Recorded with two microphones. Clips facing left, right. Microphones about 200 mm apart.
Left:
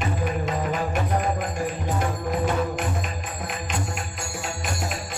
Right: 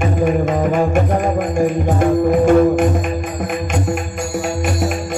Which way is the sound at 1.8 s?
50° right (ahead or behind).